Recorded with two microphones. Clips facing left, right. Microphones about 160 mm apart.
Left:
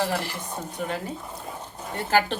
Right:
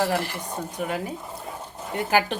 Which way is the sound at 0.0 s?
10° right (ahead or behind).